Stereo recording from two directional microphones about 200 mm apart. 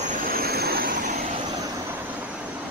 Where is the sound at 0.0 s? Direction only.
45° right (ahead or behind).